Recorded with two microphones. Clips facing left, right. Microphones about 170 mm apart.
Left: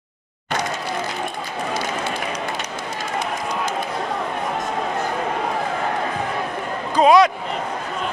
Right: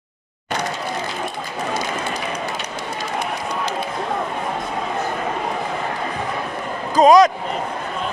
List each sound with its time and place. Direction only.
7.0 s speech: 45° right (ahead or behind)